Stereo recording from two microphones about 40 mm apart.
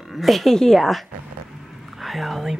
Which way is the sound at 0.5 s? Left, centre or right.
Centre.